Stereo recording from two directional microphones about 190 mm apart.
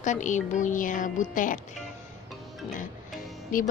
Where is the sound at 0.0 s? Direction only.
40° left (ahead or behind).